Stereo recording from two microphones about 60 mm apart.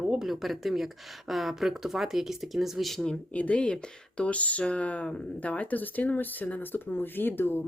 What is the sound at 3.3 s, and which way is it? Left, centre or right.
Speech, left.